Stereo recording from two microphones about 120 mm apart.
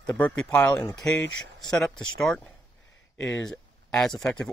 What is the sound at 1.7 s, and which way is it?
Speech, centre (ahead or behind).